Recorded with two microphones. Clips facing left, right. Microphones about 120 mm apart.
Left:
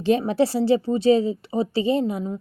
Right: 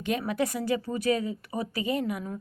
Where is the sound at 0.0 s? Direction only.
30° left (ahead or behind).